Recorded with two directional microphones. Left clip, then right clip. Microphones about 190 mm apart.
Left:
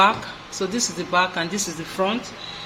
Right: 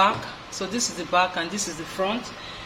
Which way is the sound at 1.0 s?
30° left (ahead or behind).